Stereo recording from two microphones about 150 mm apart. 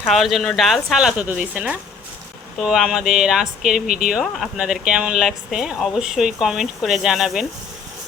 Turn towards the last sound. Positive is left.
turn(degrees=-5)  # may be behind; listen again after turning